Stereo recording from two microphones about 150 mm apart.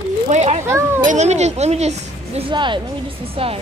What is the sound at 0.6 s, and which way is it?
Speech, 15° right (ahead or behind).